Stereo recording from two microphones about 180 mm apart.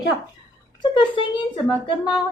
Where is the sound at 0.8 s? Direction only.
25° left (ahead or behind).